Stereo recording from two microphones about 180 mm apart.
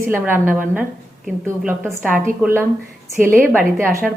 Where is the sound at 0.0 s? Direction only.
10° right (ahead or behind).